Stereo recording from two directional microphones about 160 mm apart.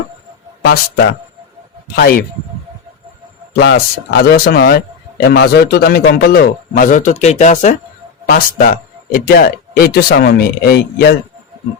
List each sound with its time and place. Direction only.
0.6 s a man's voice: 75° left (ahead or behind)
3.5 s a man's voice: 90° left
5.3 s speech: 90° left; by 7.8 s 50° left (ahead or behind)
8.3 s a man's voice: 70° left (ahead or behind)